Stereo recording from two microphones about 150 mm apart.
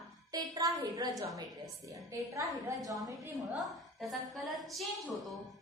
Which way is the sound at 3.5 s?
Centre (ahead or behind).